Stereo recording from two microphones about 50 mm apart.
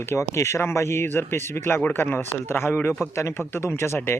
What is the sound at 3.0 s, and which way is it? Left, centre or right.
Speech, left.